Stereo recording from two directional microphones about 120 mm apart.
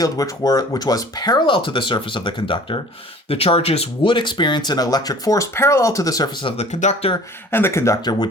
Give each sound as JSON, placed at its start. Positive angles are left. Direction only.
{"t": 0.0, "sound": "speech", "side_deg": 30}
{"t": 3.2, "sound": "speech", "side_deg": 55}
{"t": 6.6, "sound": "speech", "side_deg": 75}
{"t": 7.5, "sound": "speech", "side_deg": 20}